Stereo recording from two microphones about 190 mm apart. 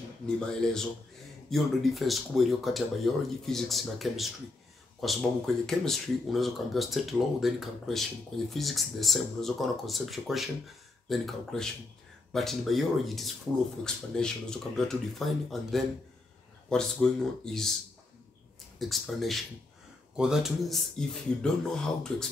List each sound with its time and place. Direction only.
0.5 s speech: 5° left (ahead or behind)
18.8 s speech: centre (ahead or behind)